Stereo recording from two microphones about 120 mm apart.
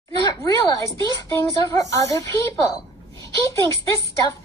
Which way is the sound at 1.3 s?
25° left (ahead or behind).